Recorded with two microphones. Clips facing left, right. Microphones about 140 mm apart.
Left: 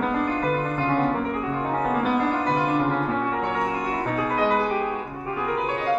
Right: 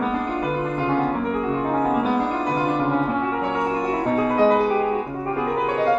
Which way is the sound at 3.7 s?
30° right (ahead or behind).